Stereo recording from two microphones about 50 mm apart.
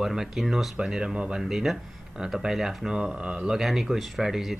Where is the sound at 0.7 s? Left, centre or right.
Centre.